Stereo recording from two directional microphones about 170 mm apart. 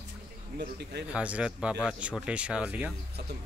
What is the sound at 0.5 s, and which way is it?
Speech, 75° right (ahead or behind).